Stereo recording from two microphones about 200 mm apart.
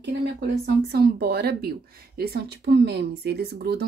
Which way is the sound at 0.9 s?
50° right (ahead or behind).